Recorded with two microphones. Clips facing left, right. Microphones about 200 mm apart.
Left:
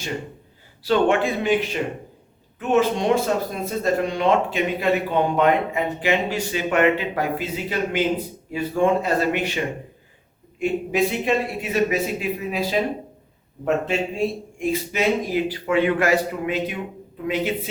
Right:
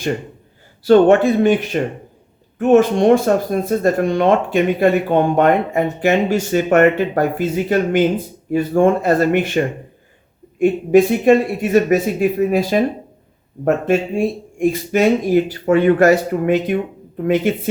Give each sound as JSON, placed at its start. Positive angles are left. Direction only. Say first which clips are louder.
{"t": 0.9, "sound": "speech", "louder": "right 9 dB", "side_deg": -40}